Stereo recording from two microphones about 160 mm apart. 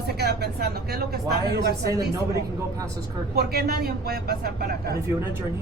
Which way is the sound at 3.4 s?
80° right.